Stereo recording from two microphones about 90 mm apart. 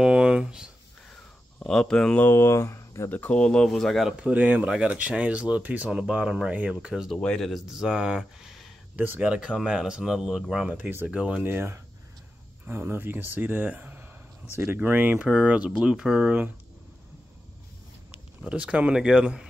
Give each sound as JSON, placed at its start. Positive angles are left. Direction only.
{"t": 0.0, "sound": "a sound", "side_deg": -10}
{"t": 1.6, "sound": "speech", "side_deg": 10}
{"t": 2.2, "sound": "speech", "side_deg": 30}
{"t": 3.1, "sound": "speech", "side_deg": 15}
{"t": 4.3, "sound": "speech", "side_deg": -15}
{"t": 6.9, "sound": "speech", "side_deg": -5}
{"t": 7.5, "sound": "speech", "side_deg": -5}
{"t": 8.9, "sound": "speech", "side_deg": -20}
{"t": 9.2, "sound": "speech", "side_deg": -10}
{"t": 18.4, "sound": "speech", "side_deg": -15}